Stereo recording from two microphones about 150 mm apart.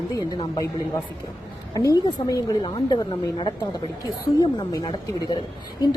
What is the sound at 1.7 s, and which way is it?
A woman's voice, 25° left (ahead or behind).